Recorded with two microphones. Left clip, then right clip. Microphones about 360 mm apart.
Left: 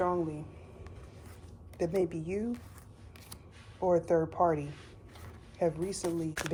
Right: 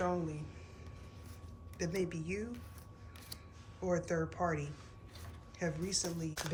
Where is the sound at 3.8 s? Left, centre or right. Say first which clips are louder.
Left 8 dB; centre.